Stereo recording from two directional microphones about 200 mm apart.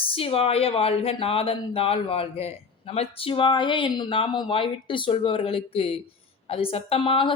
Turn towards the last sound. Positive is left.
turn(degrees=25)  # may be behind; listen again after turning